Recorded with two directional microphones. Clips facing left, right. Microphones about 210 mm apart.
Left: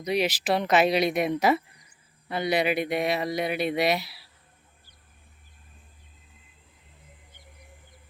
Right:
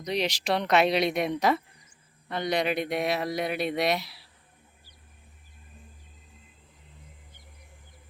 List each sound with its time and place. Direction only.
0.0 s speech: 5° left (ahead or behind)